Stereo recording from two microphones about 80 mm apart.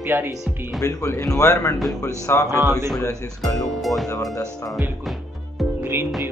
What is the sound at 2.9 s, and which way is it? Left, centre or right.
Speech, left.